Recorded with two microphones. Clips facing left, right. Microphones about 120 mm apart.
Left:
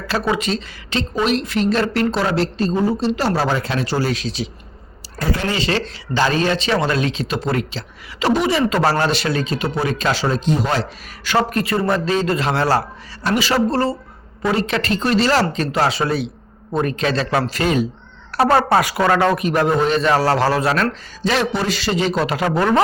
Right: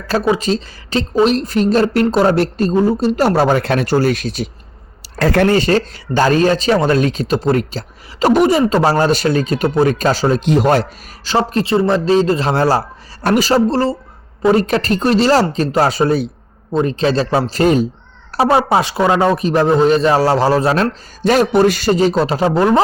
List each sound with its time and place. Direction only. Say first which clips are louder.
0.3 s a woman's voice: right 4 dB; 40° right (ahead or behind); by 4.4 s 55° right (ahead or behind)
5.2 s speech: right 9 dB; 70° right (ahead or behind)
5.5 s a woman's voice: right 7 dB; 45° right (ahead or behind)
10.4 s speech: right 5 dB; 70° right (ahead or behind)
11.3 s speech: right 3 dB; 30° right (ahead or behind)
13.2 s a woman's voice: right 5 dB; 50° right (ahead or behind)
13.5 s speech: right 4 dB; 35° right (ahead or behind)
16.8 s speech: right 5 dB; 30° right (ahead or behind)
18.3 s speech: right 2 dB; 15° right (ahead or behind)
18.8 s speech: right 2 dB; 25° right (ahead or behind)
19.4 s speech: right 4 dB; 30° right (ahead or behind)
20.1 s speech: right 3 dB; 15° right (ahead or behind)
20.5 s speech: right 4 dB; 30° right (ahead or behind)
21.2 s a woman's voice: right 8 dB; 45° right (ahead or behind); by 22.6 s 30° right (ahead or behind)